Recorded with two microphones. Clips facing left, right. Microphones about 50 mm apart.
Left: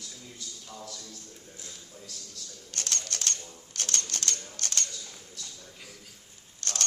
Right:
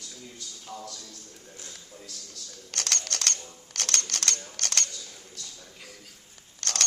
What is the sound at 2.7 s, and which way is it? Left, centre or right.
Camera, right.